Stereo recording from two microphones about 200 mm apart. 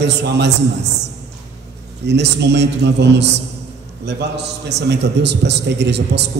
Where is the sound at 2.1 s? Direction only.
60° right (ahead or behind).